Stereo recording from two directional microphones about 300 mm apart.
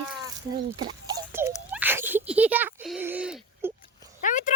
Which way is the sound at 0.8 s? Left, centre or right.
Centre.